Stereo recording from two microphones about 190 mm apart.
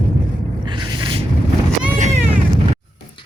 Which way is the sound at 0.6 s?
25° right (ahead or behind).